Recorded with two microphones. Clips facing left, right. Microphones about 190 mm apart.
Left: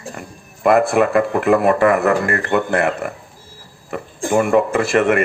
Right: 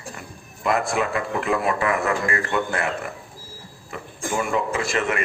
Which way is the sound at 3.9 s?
50° left (ahead or behind).